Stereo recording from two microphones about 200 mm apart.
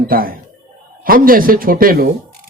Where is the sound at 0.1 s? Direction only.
45° right (ahead or behind).